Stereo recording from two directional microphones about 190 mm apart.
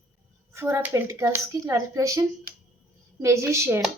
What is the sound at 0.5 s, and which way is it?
Speech, 15° right (ahead or behind).